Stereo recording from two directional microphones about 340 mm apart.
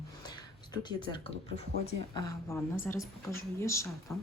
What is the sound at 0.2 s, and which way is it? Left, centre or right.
Speech, centre.